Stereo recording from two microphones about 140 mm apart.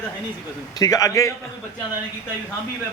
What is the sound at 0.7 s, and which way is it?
Speech, 25° left (ahead or behind).